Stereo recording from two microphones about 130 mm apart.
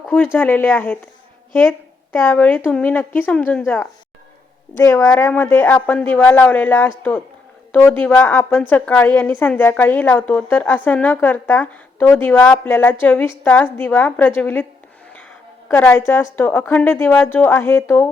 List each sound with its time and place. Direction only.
0.1 s a woman's voice: 10° left (ahead or behind)
2.1 s a woman's voice: 15° left (ahead or behind)
4.8 s a woman's voice: 20° left (ahead or behind)
15.8 s a woman's voice: 15° left (ahead or behind)